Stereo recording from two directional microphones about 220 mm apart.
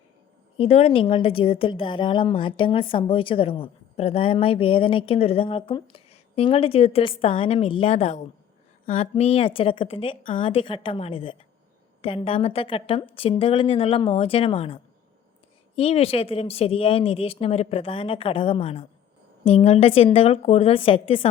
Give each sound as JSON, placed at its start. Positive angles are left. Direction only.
{"t": 0.5, "sound": "a woman's voice", "side_deg": 25}